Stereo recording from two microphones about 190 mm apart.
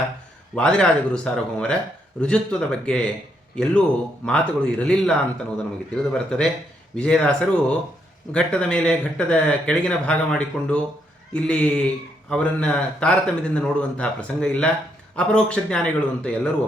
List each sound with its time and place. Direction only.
0.5 s speech: 5° left (ahead or behind)